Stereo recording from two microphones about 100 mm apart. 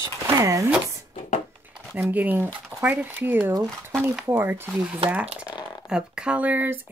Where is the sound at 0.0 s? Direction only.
35° right (ahead or behind).